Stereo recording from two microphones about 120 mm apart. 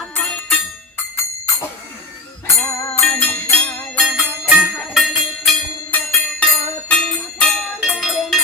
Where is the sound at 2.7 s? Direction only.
25° left (ahead or behind).